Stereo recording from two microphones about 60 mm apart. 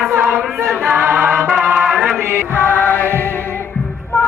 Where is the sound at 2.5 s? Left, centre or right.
Left.